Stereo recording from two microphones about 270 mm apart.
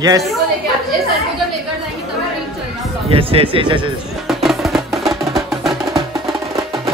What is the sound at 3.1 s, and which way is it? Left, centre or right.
Speech, right.